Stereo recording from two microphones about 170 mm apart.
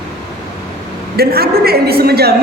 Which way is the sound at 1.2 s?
65° right (ahead or behind).